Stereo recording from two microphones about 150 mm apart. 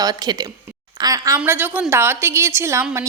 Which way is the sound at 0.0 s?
25° right (ahead or behind).